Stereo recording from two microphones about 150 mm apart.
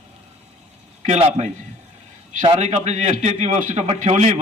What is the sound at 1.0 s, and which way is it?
Speech, 50° right (ahead or behind).